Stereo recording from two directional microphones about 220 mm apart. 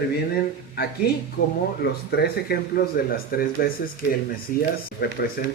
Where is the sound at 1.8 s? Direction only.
50° left (ahead or behind).